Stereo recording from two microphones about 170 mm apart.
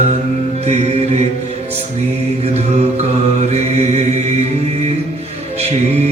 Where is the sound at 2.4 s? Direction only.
35° right (ahead or behind).